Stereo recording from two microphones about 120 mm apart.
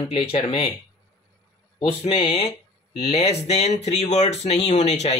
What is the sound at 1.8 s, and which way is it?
Speech, 50° left (ahead or behind).